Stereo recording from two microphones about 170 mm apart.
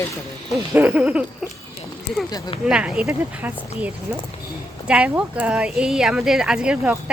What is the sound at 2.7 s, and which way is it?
Speech, 5° right (ahead or behind).